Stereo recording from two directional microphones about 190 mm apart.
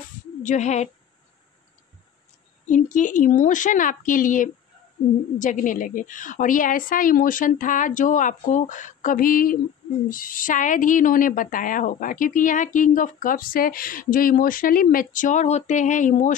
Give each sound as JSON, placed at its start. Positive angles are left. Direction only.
{"t": 0.4, "sound": "speech", "side_deg": 40}
{"t": 2.6, "sound": "a woman's voice", "side_deg": 40}